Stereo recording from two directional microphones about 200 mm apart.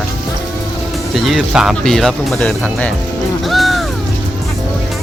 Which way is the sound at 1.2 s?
Centre (ahead or behind).